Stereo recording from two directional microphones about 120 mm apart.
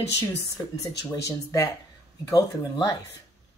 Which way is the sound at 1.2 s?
30° left (ahead or behind).